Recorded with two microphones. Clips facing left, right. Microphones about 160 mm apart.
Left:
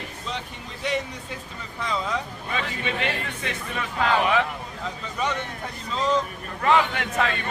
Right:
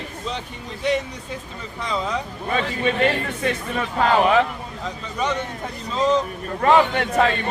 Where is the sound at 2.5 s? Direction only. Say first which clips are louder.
Right 8 dB; 40° right (ahead or behind).